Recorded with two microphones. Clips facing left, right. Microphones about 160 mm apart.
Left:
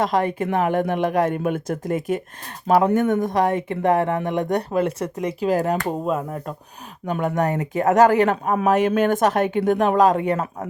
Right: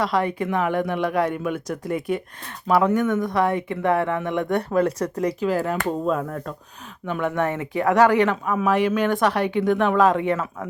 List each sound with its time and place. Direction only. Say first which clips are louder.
0.0 s speech: left 2 dB; 45° left (ahead or behind)
4.9 s speech: right 1 dB; 25° left (ahead or behind)
5.6 s speech: left 1 dB; 10° left (ahead or behind)
7.1 s speech: left 2 dB; 40° left (ahead or behind)